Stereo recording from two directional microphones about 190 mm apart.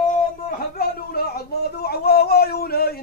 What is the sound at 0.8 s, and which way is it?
Speech, 55° left (ahead or behind).